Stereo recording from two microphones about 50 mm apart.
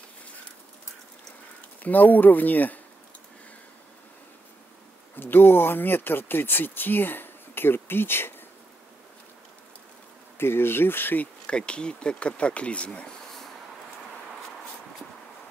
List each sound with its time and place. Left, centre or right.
1.8 s speech: left
5.1 s speech: left
10.3 s speech: left
11.4 s speech: centre